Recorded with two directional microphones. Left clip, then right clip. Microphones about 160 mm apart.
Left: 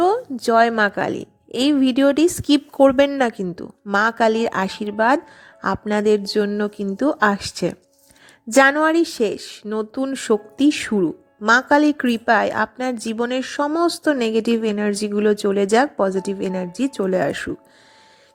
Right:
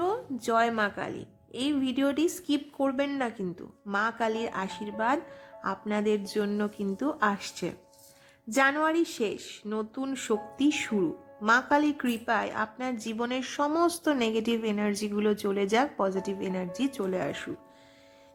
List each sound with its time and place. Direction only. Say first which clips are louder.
0.0 s a sound: left 12 dB; 45° left (ahead or behind)
0.8 s a woman's voice: left 11 dB; 50° left (ahead or behind)
8.8 s speech: left 10 dB; 45° left (ahead or behind)